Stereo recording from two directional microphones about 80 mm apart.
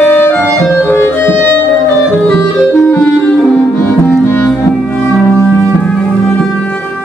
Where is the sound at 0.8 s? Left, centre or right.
Left.